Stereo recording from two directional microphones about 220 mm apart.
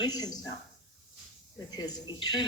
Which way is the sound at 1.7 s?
20° left (ahead or behind).